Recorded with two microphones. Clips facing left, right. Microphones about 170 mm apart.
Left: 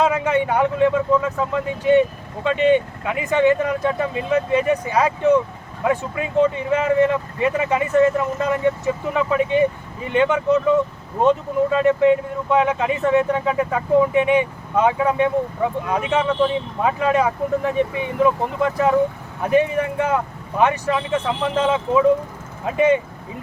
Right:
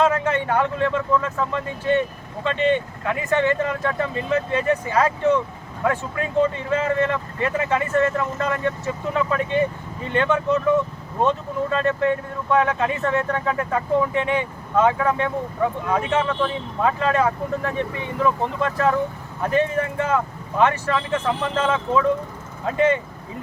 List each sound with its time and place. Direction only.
0.0 s speech: 15° left (ahead or behind)